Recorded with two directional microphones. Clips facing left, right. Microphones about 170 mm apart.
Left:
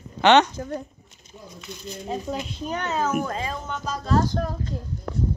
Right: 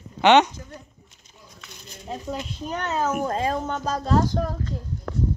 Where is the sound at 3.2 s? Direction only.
35° right (ahead or behind).